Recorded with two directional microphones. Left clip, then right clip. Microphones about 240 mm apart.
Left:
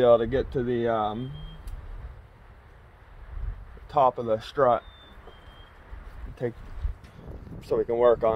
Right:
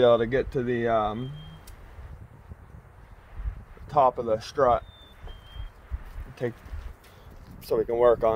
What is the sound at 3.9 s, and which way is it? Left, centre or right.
Speech, right.